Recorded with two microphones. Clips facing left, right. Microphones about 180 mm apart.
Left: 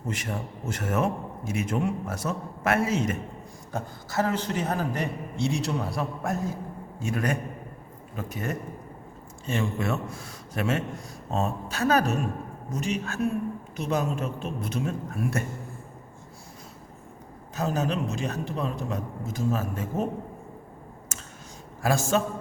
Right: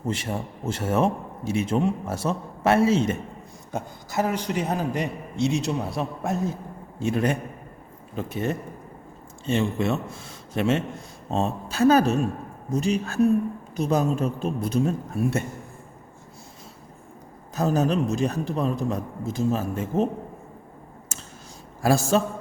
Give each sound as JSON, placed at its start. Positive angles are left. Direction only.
{"t": 0.1, "sound": "a man's voice", "side_deg": -30}
{"t": 3.7, "sound": "a man's voice", "side_deg": -15}
{"t": 17.5, "sound": "a man's voice", "side_deg": -40}
{"t": 21.8, "sound": "a man's voice", "side_deg": -35}